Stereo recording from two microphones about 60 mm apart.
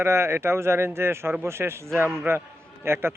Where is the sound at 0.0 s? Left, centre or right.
Right.